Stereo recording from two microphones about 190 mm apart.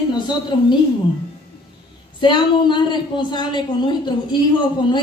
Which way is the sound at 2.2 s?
25° left (ahead or behind).